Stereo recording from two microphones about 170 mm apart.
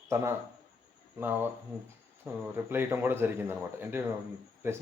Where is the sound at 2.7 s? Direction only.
10° right (ahead or behind).